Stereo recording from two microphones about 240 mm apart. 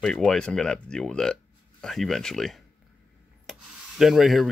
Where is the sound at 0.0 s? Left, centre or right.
Centre.